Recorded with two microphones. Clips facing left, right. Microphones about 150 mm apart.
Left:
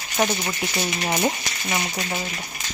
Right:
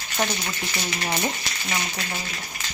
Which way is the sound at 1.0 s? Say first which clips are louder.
Left 4 dB; 15° left (ahead or behind).